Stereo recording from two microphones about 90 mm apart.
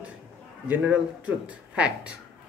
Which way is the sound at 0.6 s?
15° right (ahead or behind).